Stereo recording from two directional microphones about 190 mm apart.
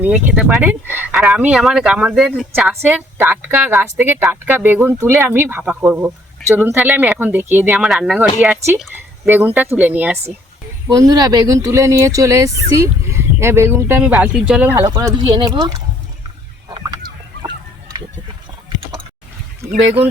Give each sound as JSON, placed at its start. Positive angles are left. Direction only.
{"t": 0.0, "sound": "speech", "side_deg": -10}
{"t": 10.8, "sound": "speech", "side_deg": -20}
{"t": 16.6, "sound": "chicken", "side_deg": -20}